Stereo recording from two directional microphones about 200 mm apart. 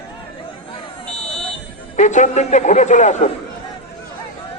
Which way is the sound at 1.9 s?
35° left (ahead or behind).